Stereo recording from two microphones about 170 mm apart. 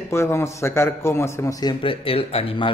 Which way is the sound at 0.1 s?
15° left (ahead or behind).